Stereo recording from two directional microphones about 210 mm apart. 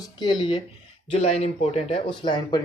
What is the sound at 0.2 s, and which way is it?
Speech, 20° left (ahead or behind).